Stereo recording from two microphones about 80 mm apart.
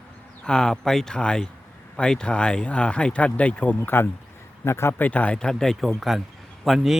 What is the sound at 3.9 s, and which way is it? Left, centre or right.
Speech, left.